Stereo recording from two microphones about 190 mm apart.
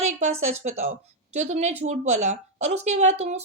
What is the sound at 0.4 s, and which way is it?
A woman's voice, 35° right (ahead or behind).